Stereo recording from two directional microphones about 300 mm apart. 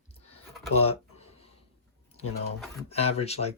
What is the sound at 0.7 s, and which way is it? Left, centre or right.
Speech, centre.